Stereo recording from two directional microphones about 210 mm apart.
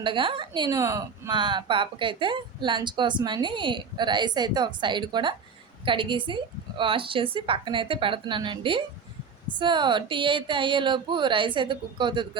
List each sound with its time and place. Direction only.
0.0 s a woman's voice: 25° right (ahead or behind)